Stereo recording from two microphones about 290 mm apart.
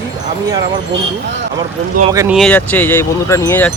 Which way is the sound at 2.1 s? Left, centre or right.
Centre.